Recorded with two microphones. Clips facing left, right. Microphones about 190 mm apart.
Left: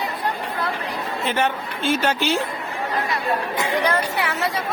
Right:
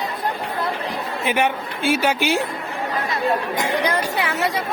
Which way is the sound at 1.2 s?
10° right (ahead or behind).